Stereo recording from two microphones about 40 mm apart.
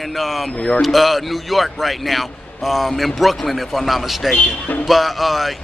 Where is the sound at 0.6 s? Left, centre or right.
Left.